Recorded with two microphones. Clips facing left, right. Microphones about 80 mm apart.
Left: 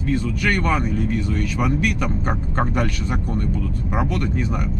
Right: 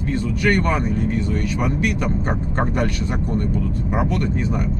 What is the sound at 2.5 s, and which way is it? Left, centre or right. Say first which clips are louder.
Speech: right 1 dB; centre.